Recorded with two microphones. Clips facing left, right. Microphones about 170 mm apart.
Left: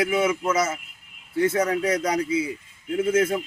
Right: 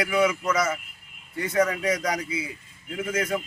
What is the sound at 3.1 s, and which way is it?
Speech, 25° left (ahead or behind).